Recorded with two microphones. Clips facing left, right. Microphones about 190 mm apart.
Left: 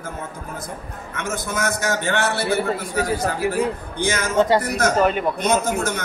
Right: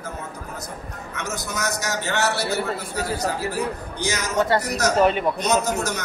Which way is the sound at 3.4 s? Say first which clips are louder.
Left 5 dB; 15° left (ahead or behind).